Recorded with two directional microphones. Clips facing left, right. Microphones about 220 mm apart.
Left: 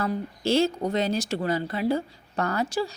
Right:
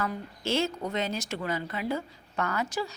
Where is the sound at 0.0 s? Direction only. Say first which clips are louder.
Left 5 dB; 35° left (ahead or behind).